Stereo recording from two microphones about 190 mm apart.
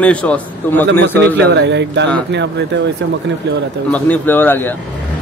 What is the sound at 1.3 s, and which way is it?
Speech, 65° right (ahead or behind).